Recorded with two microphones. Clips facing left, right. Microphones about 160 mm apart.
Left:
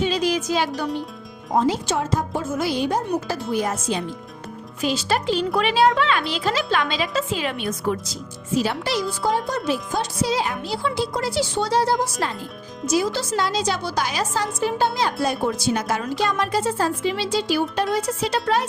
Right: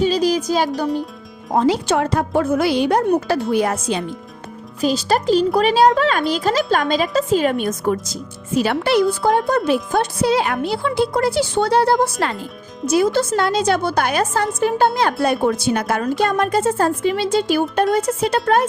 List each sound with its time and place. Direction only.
0.0 s speech: 35° right (ahead or behind)
1.5 s speech: 70° right (ahead or behind)
4.8 s speech: 40° right (ahead or behind)
8.5 s speech: 60° right (ahead or behind)